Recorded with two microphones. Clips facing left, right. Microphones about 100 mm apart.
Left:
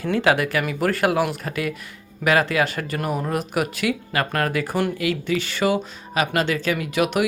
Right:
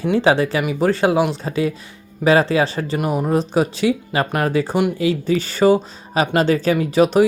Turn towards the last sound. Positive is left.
turn(degrees=-35)  # may be behind; listen again after turning